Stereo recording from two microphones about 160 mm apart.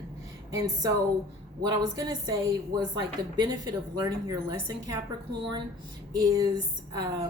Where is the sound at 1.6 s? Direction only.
25° right (ahead or behind).